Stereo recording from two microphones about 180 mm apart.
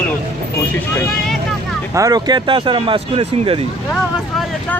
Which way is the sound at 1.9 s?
20° right (ahead or behind).